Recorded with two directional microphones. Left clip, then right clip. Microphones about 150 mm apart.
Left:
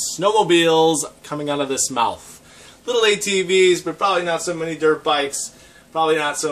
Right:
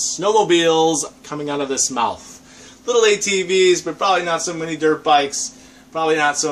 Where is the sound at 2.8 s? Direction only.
15° left (ahead or behind).